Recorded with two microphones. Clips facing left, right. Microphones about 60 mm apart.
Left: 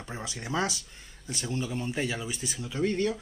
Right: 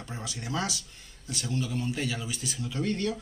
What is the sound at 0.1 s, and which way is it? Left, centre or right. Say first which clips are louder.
Speech: left 2 dB; left.